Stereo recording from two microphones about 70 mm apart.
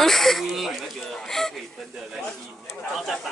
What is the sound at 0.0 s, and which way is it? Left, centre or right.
Speech, centre.